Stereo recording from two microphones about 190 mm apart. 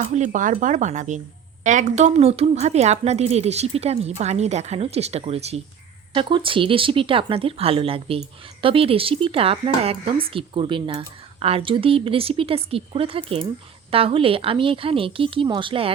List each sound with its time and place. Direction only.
0.0 s speech: 40° right (ahead or behind)